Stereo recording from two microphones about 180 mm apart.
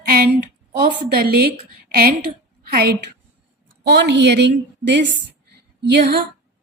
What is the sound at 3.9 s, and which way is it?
Speech, 70° right (ahead or behind).